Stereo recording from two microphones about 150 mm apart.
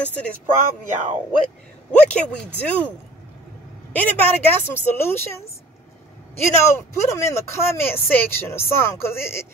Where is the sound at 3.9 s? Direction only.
10° left (ahead or behind).